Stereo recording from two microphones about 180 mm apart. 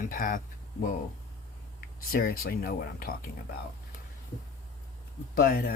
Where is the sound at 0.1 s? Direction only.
50° left (ahead or behind).